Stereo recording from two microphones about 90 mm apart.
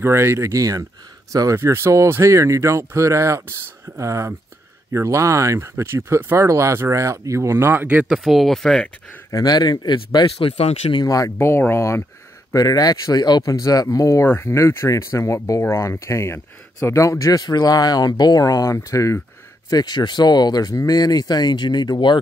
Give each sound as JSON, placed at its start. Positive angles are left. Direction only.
{"t": 0.0, "sound": "speech", "side_deg": -25}
{"t": 8.2, "sound": "speech", "side_deg": 0}
{"t": 9.3, "sound": "speech", "side_deg": 45}
{"t": 10.4, "sound": "speech", "side_deg": 75}
{"t": 11.0, "sound": "speech", "side_deg": 40}
{"t": 11.3, "sound": "speech", "side_deg": 30}
{"t": 12.5, "sound": "speech", "side_deg": 45}
{"t": 14.2, "sound": "speech", "side_deg": 30}
{"t": 19.7, "sound": "speech", "side_deg": 50}